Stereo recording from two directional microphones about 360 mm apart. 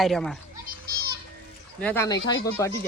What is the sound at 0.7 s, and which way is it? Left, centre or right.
Children playing, right.